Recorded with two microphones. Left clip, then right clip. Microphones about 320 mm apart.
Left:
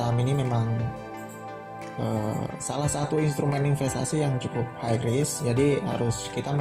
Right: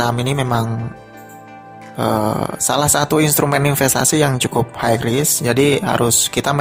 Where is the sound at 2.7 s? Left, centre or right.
Right.